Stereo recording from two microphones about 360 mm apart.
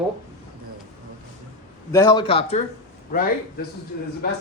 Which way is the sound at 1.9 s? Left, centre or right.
Centre.